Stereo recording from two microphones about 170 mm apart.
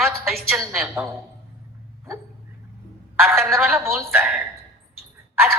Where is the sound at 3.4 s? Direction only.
Centre (ahead or behind).